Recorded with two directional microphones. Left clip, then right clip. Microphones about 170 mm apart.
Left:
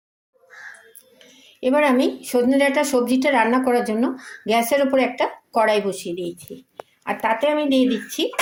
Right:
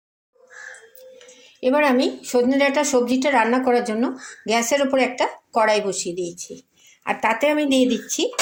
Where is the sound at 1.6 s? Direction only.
5° left (ahead or behind).